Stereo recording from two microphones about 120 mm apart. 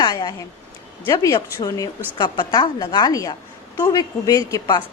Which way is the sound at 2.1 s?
40° left (ahead or behind).